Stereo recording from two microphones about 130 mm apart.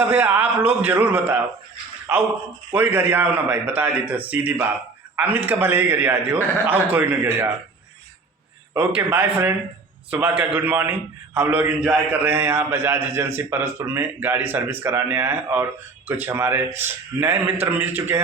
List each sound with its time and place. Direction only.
0.0 s a man's voice: 10° right (ahead or behind)
8.7 s a man's voice: 10° right (ahead or behind)
11.8 s a man's voice: centre (ahead or behind)
12.2 s a man's voice: 15° right (ahead or behind)